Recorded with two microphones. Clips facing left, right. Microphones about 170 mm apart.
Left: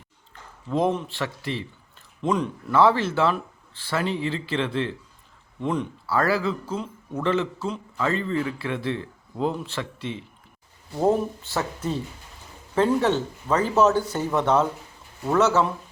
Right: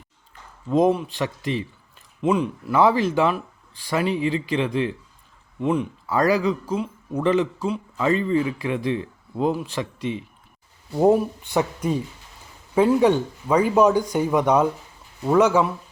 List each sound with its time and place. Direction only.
0.7 s speech: 15° right (ahead or behind)